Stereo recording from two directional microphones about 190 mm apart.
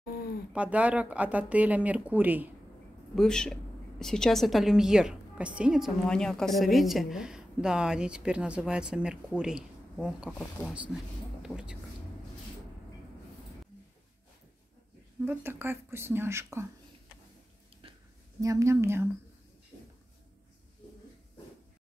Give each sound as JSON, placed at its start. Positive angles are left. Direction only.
{"t": 0.5, "sound": "speech", "side_deg": -5}
{"t": 3.2, "sound": "a woman's voice", "side_deg": 5}
{"t": 15.2, "sound": "speech", "side_deg": -10}
{"t": 17.8, "sound": "a sound", "side_deg": -30}
{"t": 18.4, "sound": "speech", "side_deg": -15}